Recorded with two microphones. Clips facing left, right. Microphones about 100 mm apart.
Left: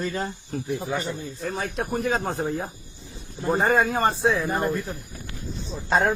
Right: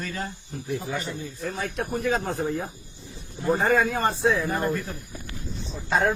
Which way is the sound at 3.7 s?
35° left (ahead or behind).